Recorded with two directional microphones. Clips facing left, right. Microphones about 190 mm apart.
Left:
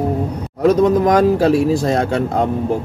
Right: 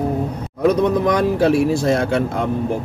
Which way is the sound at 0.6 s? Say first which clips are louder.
Left 3 dB; 90° left.